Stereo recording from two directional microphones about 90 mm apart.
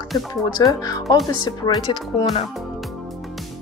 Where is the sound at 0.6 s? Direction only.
40° left (ahead or behind).